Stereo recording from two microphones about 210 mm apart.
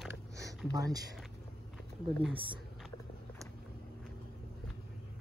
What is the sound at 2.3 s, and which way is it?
Speech, 25° right (ahead or behind).